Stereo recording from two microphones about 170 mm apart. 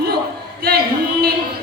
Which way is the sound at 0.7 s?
65° right (ahead or behind).